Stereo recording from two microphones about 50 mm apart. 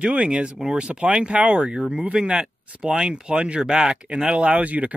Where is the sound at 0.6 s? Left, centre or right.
Centre.